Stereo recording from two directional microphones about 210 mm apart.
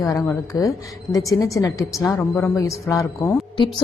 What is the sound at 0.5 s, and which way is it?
A woman's voice, 20° left (ahead or behind).